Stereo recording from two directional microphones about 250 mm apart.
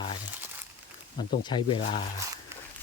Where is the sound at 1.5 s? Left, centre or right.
Centre.